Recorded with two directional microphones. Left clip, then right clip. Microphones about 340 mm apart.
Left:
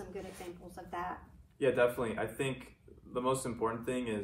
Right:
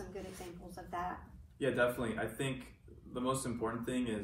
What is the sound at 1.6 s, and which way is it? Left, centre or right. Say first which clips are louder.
Speech: left 3 dB; centre.